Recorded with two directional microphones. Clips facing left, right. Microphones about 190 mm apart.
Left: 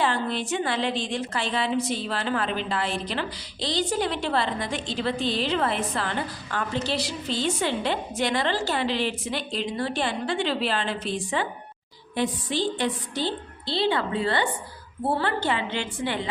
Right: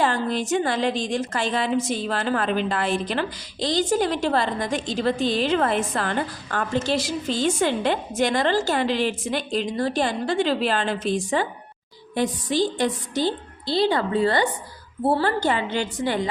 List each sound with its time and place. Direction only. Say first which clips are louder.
0.0 s a woman's voice: right 3 dB; 45° right (ahead or behind)